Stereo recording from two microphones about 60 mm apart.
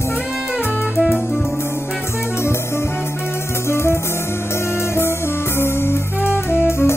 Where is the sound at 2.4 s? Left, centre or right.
Left.